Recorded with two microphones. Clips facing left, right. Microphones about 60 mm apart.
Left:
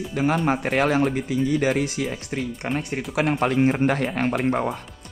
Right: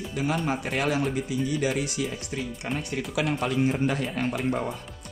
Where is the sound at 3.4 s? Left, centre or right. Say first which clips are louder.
Left 6 dB; left.